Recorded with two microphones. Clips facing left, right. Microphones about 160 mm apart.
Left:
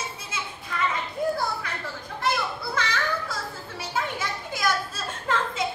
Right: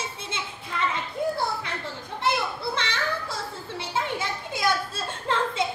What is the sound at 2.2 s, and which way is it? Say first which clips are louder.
Children playing: right 1 dB; 25° right (ahead or behind).